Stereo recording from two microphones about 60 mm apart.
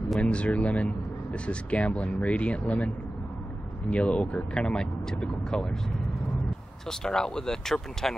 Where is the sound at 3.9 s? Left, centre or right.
Centre.